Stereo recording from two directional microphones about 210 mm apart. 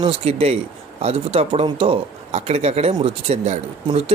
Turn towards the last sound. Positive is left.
turn(degrees=-30)  # may be behind; listen again after turning